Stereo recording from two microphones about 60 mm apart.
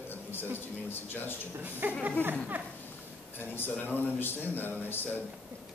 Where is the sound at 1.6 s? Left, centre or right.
Right.